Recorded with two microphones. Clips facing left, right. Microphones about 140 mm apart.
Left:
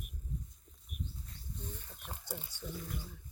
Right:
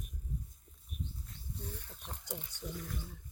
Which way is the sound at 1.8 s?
10° left (ahead or behind).